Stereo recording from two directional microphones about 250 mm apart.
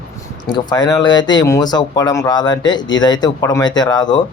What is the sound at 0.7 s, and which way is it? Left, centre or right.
Speech, centre.